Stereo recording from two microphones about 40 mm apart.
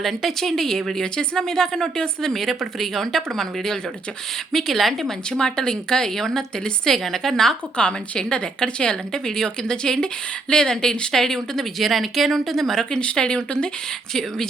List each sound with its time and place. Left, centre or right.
0.0 s a woman's voice: centre
1.0 s a woman's voice: left
5.3 s a woman's voice: centre
7.8 s a woman's voice: left
11.8 s speech: centre
13.1 s a woman's voice: left
14.1 s a woman's voice: centre